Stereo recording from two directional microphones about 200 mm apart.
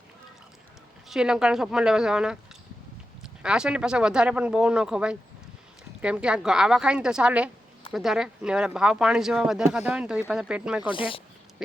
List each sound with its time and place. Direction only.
1.0 s speech: 5° right (ahead or behind)
3.4 s speech: 5° right (ahead or behind)
10.9 s speech: 25° left (ahead or behind)